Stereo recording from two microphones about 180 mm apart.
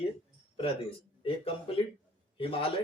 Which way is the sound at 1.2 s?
30° left (ahead or behind).